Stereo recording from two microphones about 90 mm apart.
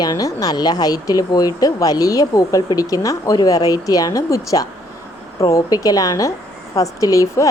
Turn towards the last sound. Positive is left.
turn(degrees=40)  # may be behind; listen again after turning